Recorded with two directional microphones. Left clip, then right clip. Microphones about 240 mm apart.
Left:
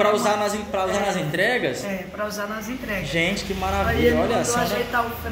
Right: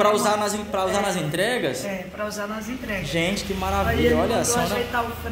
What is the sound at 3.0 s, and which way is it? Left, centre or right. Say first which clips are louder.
A woman's voice: left 2 dB; centre.